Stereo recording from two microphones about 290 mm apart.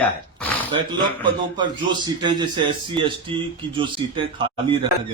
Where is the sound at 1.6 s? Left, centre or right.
Centre.